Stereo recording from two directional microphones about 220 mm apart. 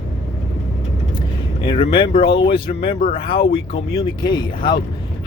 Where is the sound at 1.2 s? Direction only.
20° left (ahead or behind).